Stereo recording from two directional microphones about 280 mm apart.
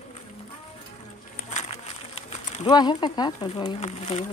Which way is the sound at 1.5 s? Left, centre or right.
Left.